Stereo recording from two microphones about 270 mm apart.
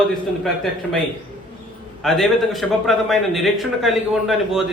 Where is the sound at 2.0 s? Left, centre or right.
Centre.